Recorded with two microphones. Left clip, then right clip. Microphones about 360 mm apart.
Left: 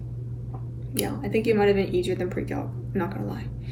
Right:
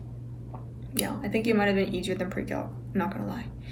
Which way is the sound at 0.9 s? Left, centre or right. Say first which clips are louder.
Left 3 dB; centre.